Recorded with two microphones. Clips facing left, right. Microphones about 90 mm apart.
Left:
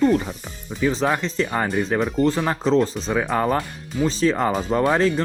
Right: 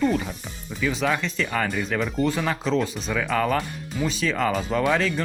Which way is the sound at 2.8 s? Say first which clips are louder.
Left 4 dB; 35° left (ahead or behind).